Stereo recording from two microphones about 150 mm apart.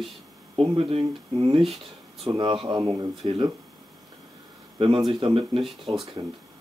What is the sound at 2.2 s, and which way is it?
Speech, 35° right (ahead or behind).